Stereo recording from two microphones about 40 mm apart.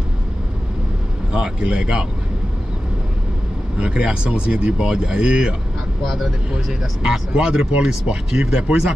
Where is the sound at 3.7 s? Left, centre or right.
Right.